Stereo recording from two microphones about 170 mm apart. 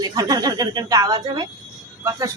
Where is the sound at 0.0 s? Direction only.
20° right (ahead or behind).